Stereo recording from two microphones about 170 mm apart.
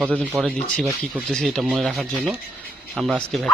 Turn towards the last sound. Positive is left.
turn(degrees=0)  # may be behind; listen again after turning